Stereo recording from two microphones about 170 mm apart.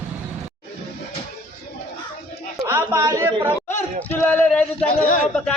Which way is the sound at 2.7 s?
15° right (ahead or behind).